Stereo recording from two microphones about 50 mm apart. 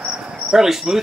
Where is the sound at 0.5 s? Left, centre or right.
Centre.